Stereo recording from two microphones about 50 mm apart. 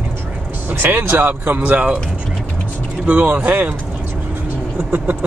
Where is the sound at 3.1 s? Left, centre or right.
Right.